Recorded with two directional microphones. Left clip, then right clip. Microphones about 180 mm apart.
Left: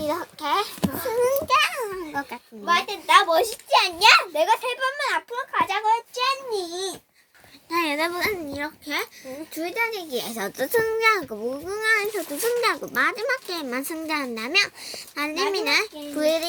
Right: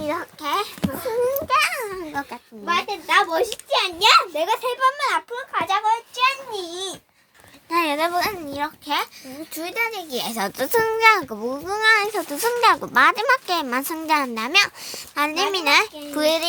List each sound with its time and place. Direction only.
0.2 s a child's voice: 5° left (ahead or behind)
1.1 s a sound: 15° left (ahead or behind)
1.5 s a sound: 10° right (ahead or behind)
2.8 s a child's voice: 5° right (ahead or behind); by 6.2 s 25° right (ahead or behind)
6.5 s a child's voice: 40° right (ahead or behind)
7.7 s a child's voice: 30° right (ahead or behind); by 16.5 s 50° right (ahead or behind)